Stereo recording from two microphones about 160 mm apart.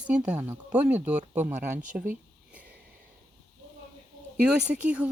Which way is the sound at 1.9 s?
10° right (ahead or behind).